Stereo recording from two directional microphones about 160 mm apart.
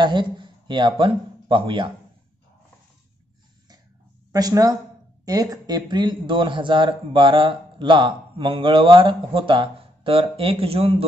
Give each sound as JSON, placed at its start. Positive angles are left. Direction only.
{"t": 0.0, "sound": "speech", "side_deg": -30}
{"t": 4.3, "sound": "speech", "side_deg": -25}